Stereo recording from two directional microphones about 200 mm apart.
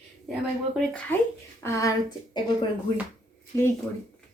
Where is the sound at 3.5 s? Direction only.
15° left (ahead or behind).